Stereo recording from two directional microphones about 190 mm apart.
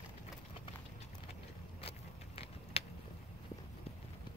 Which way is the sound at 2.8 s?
30° left (ahead or behind).